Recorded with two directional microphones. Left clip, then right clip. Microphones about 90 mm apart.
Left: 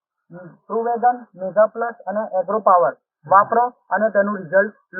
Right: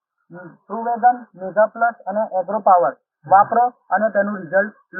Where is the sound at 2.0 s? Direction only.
75° left (ahead or behind).